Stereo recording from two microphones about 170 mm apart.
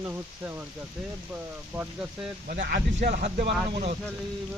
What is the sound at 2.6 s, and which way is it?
Speech, 70° right (ahead or behind).